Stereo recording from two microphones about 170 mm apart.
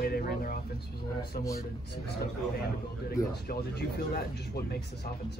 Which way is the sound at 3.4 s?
65° left (ahead or behind).